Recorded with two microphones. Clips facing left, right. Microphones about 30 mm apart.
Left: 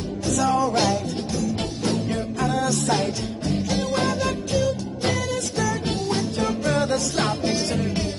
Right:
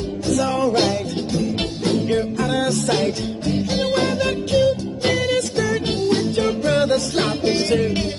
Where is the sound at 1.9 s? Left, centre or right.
Right.